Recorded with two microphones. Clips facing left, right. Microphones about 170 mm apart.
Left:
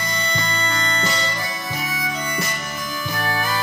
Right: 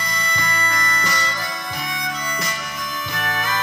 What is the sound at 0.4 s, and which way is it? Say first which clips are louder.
Music: even; 25° left (ahead or behind).